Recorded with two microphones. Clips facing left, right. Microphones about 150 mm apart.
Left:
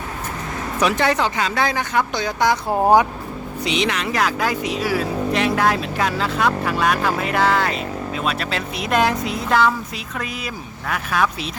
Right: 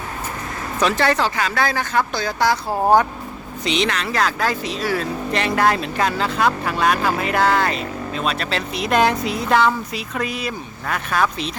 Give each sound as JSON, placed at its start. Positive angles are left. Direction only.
{"t": 0.8, "sound": "speech", "side_deg": 15}